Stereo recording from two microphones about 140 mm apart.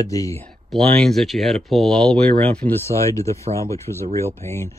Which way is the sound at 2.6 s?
20° left (ahead or behind).